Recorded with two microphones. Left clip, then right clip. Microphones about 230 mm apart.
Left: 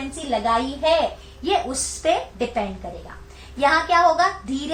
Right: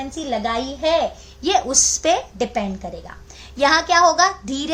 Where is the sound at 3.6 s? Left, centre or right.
Right.